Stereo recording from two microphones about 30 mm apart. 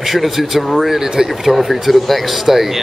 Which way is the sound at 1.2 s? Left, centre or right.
Right.